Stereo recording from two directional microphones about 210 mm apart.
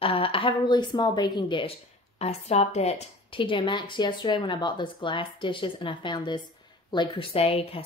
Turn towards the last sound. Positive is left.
turn(degrees=30)  # may be behind; listen again after turning